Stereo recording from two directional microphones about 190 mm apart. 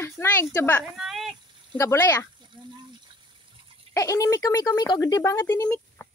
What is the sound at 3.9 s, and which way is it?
Speech, 15° left (ahead or behind).